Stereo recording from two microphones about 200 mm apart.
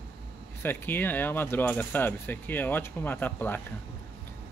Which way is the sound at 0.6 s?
10° left (ahead or behind).